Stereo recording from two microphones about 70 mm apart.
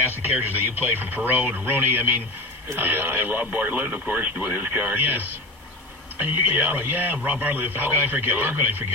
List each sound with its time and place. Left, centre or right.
0.2 s speech: right